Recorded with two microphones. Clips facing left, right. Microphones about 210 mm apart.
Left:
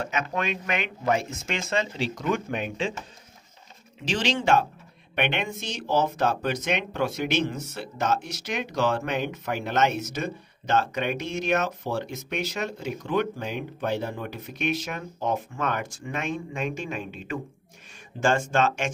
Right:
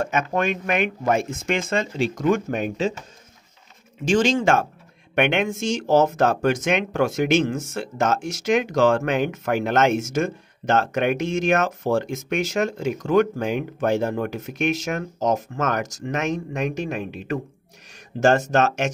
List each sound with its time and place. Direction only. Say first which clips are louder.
0.0 s speech: right 6 dB; 50° right (ahead or behind)
4.0 s speech: right 7 dB; 45° right (ahead or behind)
18.2 s speech: right 5 dB; 40° right (ahead or behind)